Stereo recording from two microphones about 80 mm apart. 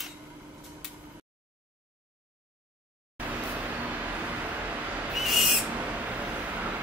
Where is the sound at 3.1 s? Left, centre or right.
Centre.